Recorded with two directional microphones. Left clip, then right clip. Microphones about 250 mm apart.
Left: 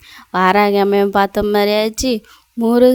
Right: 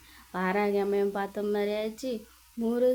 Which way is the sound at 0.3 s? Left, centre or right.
Left.